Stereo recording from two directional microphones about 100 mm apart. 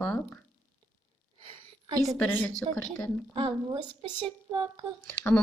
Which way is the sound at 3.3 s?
60° right (ahead or behind).